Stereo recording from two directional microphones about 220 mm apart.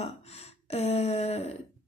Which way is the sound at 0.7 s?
30° left (ahead or behind).